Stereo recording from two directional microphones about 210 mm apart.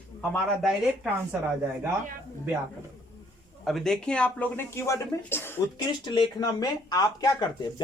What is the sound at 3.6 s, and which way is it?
Speech, centre (ahead or behind).